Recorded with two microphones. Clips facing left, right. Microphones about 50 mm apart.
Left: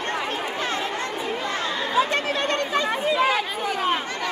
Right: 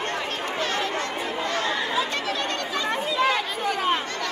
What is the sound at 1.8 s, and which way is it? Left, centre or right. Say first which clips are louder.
Chatter: left 4 dB; left.